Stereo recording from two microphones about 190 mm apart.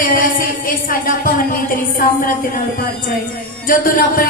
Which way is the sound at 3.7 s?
45° left (ahead or behind).